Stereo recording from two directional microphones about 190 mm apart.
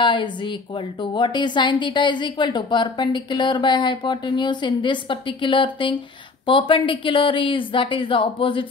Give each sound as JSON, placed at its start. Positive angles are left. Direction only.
{"t": 0.0, "sound": "speech", "side_deg": 25}